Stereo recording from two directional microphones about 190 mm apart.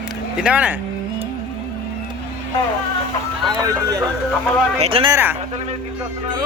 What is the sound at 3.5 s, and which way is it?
Speech, 20° right (ahead or behind).